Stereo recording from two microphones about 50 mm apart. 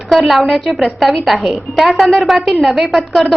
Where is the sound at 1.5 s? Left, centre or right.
Centre.